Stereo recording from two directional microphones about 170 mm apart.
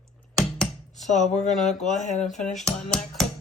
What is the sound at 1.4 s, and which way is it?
Speech, 5° left (ahead or behind).